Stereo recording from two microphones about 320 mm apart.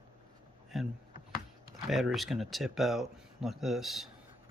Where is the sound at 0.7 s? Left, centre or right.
Centre.